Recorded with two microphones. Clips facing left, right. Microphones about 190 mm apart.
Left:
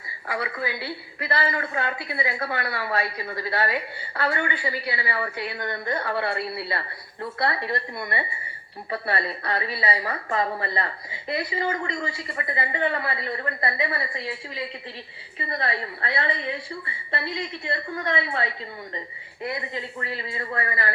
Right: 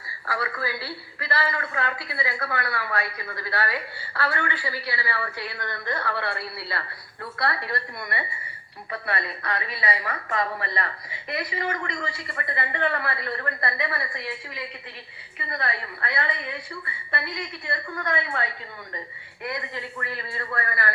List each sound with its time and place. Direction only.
0.3 s a woman's voice: 20° left (ahead or behind)